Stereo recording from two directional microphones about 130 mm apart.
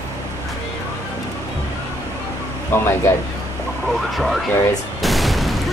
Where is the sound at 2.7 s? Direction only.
20° left (ahead or behind).